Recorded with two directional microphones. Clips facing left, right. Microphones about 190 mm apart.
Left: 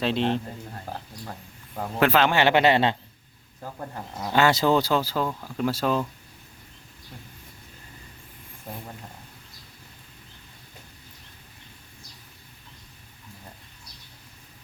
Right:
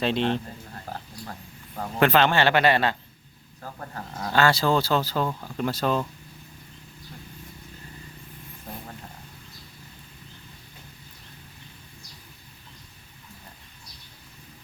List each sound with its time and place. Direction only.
0.0 s speech: centre (ahead or behind)